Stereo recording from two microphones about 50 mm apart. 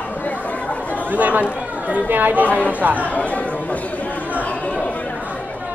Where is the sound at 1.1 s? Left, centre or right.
Right.